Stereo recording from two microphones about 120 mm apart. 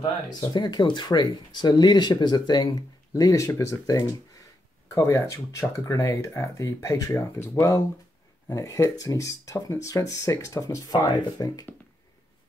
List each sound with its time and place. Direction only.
0.3 s speech: 35° left (ahead or behind)
8.5 s speech: 25° left (ahead or behind)